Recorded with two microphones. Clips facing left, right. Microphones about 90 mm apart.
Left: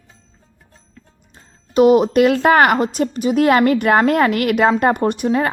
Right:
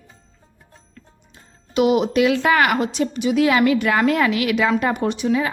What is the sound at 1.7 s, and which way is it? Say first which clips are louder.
A woman's voice: left 5 dB; 40° left (ahead or behind).